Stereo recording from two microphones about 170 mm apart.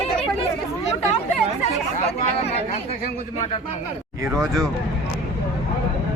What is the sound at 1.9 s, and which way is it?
Speech, 35° left (ahead or behind).